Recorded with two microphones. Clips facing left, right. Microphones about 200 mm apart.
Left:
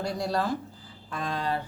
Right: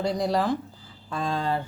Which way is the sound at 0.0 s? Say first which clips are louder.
Right 4 dB; 20° right (ahead or behind).